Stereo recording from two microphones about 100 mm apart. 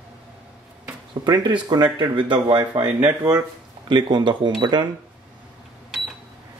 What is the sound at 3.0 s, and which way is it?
Speech, 40° right (ahead or behind).